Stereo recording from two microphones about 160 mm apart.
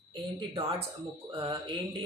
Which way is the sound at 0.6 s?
35° right (ahead or behind).